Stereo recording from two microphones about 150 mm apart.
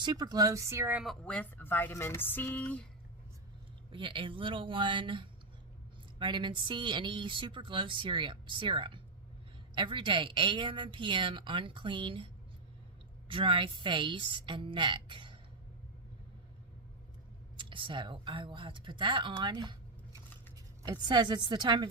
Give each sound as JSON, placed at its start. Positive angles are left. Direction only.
{"t": 0.0, "sound": "speech", "side_deg": -30}
{"t": 1.0, "sound": "speech", "side_deg": 5}
{"t": 3.9, "sound": "speech", "side_deg": -35}
{"t": 17.6, "sound": "speech", "side_deg": -35}
{"t": 20.8, "sound": "speech", "side_deg": -30}